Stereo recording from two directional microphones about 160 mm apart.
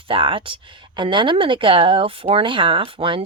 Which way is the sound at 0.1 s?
35° right (ahead or behind).